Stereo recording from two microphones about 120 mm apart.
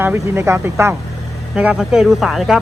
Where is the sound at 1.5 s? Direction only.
5° right (ahead or behind).